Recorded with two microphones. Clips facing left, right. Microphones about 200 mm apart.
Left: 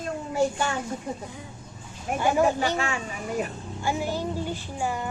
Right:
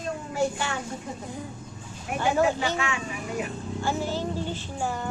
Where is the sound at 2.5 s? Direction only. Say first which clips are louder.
Left 2 dB; 40° left (ahead or behind).